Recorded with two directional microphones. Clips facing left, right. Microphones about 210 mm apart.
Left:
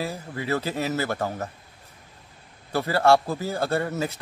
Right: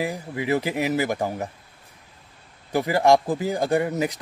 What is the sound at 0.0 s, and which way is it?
A man's voice, 15° right (ahead or behind).